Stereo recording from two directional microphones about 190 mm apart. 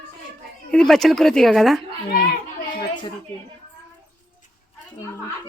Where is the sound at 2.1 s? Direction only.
55° left (ahead or behind).